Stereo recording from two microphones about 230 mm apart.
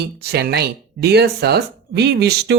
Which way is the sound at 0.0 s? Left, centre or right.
Right.